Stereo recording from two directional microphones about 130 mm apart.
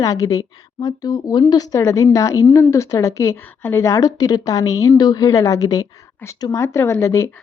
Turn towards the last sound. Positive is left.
turn(degrees=20)  # may be behind; listen again after turning